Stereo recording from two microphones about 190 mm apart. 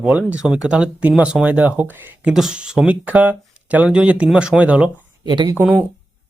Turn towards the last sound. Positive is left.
turn(degrees=-10)  # may be behind; listen again after turning